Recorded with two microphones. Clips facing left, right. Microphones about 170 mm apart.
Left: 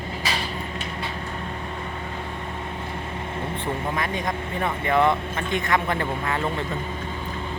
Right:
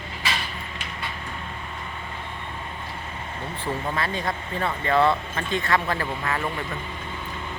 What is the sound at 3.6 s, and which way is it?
Speech, 15° left (ahead or behind).